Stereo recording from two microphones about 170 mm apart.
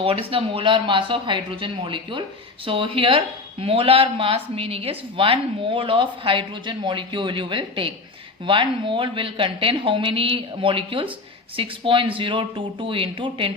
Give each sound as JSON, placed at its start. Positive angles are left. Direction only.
{"t": 0.0, "sound": "speech", "side_deg": -35}